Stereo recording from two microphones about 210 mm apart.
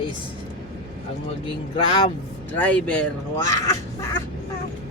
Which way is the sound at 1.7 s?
20° left (ahead or behind).